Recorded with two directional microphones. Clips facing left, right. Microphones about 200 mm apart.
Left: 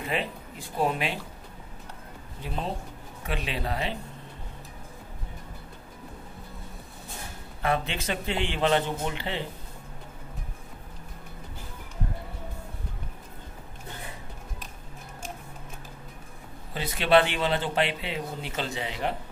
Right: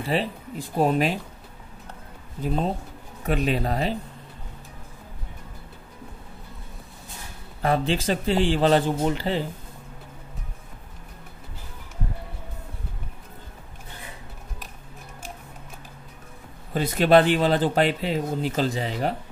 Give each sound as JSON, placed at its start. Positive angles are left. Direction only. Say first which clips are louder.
{"t": 0.0, "sound": "speech", "louder": "right 5 dB", "side_deg": -35}
{"t": 2.4, "sound": "a man's voice", "louder": "right 7 dB", "side_deg": -40}
{"t": 7.6, "sound": "speech", "louder": "right 5 dB", "side_deg": -35}
{"t": 16.7, "sound": "speech", "louder": "right 5 dB", "side_deg": -45}